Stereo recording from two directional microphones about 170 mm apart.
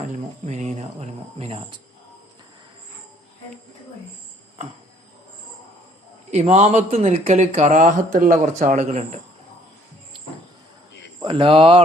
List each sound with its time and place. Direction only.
0.1 s speech: 45° right (ahead or behind)
6.3 s speech: 40° right (ahead or behind)
11.2 s speech: 30° right (ahead or behind)